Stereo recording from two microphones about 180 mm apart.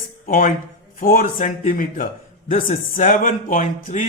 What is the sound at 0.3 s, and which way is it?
A man's voice, 50° left (ahead or behind).